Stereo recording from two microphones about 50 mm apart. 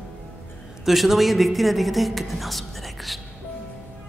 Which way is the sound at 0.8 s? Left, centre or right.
Centre.